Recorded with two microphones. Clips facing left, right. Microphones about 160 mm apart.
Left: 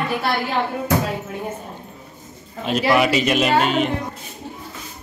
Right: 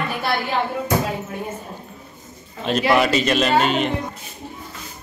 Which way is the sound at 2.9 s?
10° left (ahead or behind).